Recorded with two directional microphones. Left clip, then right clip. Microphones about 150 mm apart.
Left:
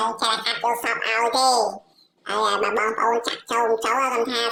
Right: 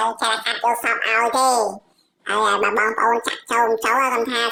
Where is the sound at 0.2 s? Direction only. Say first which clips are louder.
Right 2 dB; 5° right (ahead or behind).